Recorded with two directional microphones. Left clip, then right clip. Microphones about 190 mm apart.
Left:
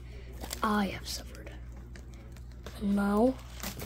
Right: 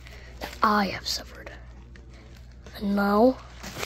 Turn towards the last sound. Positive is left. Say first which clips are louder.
# right 7 dB
turn(degrees=-10)  # may be behind; listen again after turning